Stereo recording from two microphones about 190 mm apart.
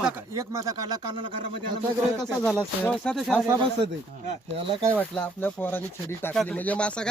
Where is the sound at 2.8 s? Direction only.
5° left (ahead or behind).